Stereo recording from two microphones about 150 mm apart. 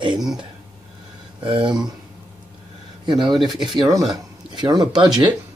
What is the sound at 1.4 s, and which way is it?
Speech, 35° right (ahead or behind).